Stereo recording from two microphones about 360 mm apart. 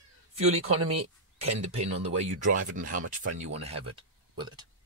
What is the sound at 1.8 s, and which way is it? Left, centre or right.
Speech, centre.